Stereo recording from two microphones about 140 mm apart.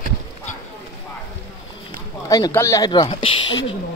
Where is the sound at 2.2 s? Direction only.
25° left (ahead or behind).